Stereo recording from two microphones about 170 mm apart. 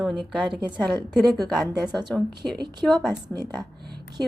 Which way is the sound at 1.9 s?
25° right (ahead or behind).